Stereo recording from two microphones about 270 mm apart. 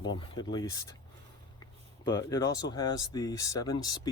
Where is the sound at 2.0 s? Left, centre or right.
Centre.